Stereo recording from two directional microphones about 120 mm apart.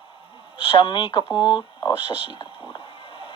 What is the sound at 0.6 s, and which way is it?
Speech, 45° left (ahead or behind).